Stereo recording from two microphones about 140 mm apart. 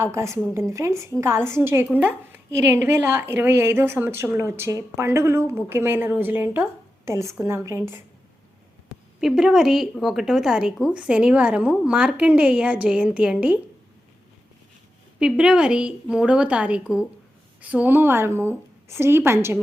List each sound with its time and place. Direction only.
0.0 s a woman's voice: 20° right (ahead or behind)
9.2 s a woman's voice: 5° right (ahead or behind)
15.2 s a woman's voice: 5° right (ahead or behind)